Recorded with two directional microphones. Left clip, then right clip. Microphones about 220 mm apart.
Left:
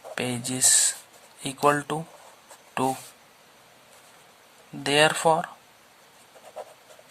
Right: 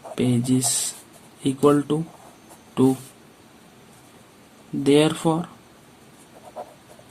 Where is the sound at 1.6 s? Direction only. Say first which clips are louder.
Right 3 dB; 50° left (ahead or behind).